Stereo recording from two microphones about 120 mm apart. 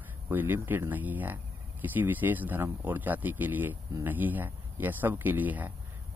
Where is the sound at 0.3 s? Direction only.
15° right (ahead or behind).